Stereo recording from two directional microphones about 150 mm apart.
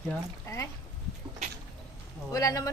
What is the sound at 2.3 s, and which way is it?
Speech, 25° left (ahead or behind).